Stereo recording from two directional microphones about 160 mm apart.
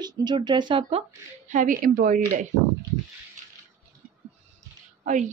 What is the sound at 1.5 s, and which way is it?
A woman's voice, 55° right (ahead or behind).